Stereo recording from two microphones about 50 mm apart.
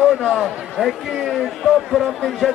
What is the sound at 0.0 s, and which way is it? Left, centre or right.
Speech, centre.